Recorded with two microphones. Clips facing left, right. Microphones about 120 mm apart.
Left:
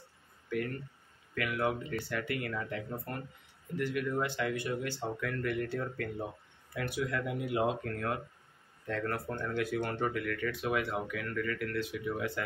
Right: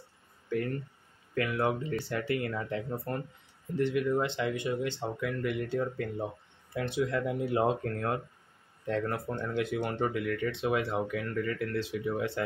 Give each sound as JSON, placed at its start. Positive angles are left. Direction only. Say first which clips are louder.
{"t": 1.3, "sound": "speech", "louder": "right 3 dB", "side_deg": -30}